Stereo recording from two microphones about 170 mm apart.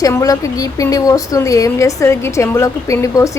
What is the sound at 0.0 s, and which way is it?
Speech, 20° left (ahead or behind).